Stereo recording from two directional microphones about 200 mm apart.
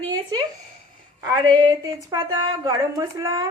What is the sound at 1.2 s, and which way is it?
A woman's voice, 20° right (ahead or behind).